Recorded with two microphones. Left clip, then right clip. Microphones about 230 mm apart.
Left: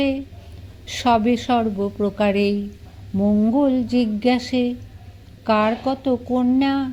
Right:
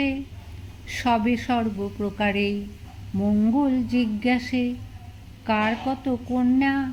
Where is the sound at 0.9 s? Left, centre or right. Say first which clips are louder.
Left 5 dB; left.